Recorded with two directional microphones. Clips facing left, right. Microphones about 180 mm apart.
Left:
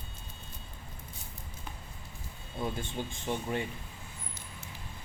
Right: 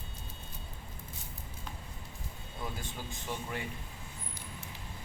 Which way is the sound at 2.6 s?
25° left (ahead or behind).